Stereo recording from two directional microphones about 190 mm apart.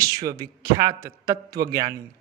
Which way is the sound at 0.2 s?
20° right (ahead or behind).